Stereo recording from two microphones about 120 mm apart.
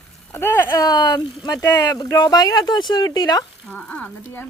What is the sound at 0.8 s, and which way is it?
Speech, 35° left (ahead or behind).